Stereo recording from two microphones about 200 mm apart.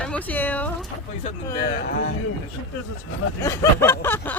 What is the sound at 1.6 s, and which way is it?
Speech, 50° left (ahead or behind).